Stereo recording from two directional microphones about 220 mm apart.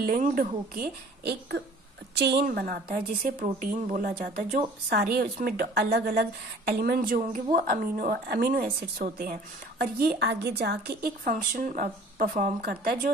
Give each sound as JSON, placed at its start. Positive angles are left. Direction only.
{"t": 0.0, "sound": "a woman's voice", "side_deg": -40}